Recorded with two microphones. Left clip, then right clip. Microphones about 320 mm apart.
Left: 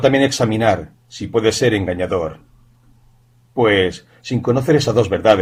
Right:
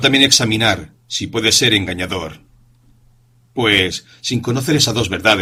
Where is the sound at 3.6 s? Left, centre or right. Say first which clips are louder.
Even; right.